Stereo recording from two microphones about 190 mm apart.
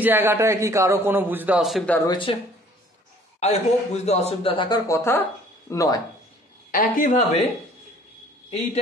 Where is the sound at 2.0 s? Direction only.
25° left (ahead or behind).